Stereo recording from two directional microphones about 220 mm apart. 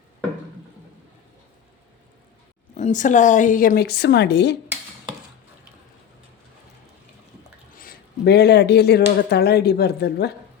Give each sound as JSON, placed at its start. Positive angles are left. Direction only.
{"t": 2.7, "sound": "a woman's voice", "side_deg": 35}
{"t": 7.8, "sound": "speech", "side_deg": 45}